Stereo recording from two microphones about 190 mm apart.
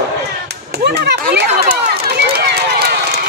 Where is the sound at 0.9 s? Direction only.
60° right (ahead or behind).